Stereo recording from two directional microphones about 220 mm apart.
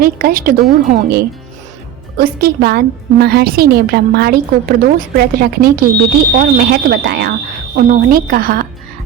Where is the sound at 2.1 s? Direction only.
40° right (ahead or behind).